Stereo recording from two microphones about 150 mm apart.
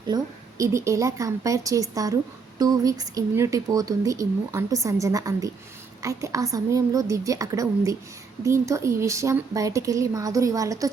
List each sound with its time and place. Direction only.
0.6 s a woman's voice: 20° right (ahead or behind)